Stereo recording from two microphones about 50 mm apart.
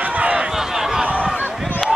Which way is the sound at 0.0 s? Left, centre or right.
Right.